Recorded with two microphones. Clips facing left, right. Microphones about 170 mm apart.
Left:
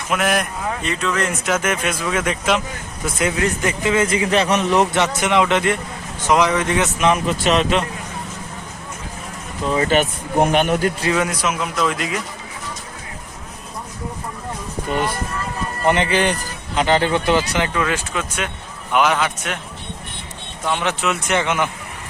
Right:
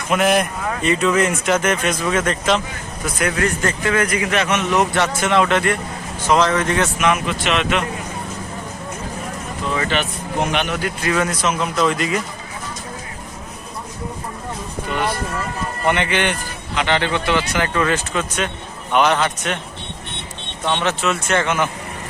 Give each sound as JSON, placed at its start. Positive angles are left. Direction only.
{"t": 0.1, "sound": "speech", "side_deg": 0}
{"t": 3.2, "sound": "a man's voice", "side_deg": 20}
{"t": 7.0, "sound": "a man's voice", "side_deg": 35}
{"t": 9.7, "sound": "speech", "side_deg": 45}
{"t": 11.1, "sound": "speech", "side_deg": 15}
{"t": 14.9, "sound": "a man's voice", "side_deg": 45}
{"t": 17.7, "sound": "speech", "side_deg": 5}
{"t": 20.7, "sound": "speech", "side_deg": 10}